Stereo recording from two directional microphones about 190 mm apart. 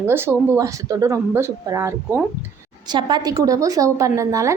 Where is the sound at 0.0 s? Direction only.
10° right (ahead or behind).